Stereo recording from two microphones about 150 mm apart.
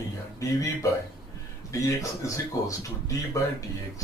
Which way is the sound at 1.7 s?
20° left (ahead or behind).